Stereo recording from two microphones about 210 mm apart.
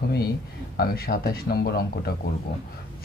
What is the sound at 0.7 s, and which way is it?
Speech, 45° left (ahead or behind).